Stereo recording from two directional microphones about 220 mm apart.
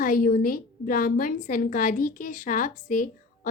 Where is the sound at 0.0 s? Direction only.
40° left (ahead or behind).